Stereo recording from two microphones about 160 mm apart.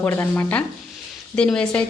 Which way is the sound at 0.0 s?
15° left (ahead or behind).